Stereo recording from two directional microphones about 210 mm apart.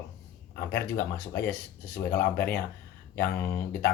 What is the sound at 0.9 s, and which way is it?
Speech, 10° left (ahead or behind).